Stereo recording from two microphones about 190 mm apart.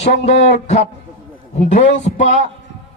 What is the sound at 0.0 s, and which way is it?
A man's voice, 35° left (ahead or behind).